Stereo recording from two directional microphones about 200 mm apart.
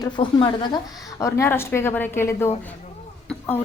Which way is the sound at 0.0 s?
25° left (ahead or behind).